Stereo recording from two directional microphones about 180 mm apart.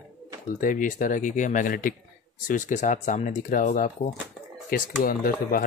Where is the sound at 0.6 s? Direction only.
50° left (ahead or behind).